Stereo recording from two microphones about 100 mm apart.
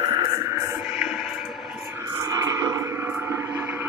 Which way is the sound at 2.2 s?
35° right (ahead or behind).